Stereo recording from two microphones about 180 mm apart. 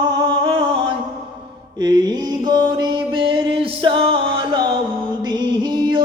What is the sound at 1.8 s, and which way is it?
Mantra, 25° right (ahead or behind).